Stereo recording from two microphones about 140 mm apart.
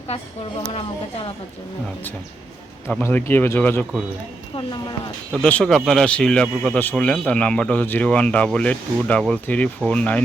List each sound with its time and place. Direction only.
0.7 s speech: 40° left (ahead or behind)
3.0 s speech: 15° left (ahead or behind)
4.5 s speech: 30° left (ahead or behind)
5.3 s speech: 5° left (ahead or behind)